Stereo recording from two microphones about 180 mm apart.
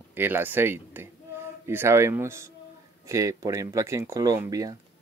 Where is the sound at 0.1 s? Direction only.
10° right (ahead or behind).